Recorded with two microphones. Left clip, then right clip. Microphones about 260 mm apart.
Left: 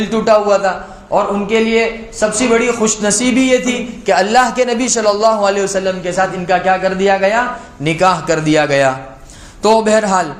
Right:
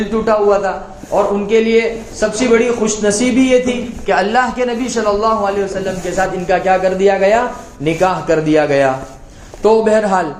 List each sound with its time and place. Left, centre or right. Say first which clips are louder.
0.1 s a man's voice: left 2 dB; left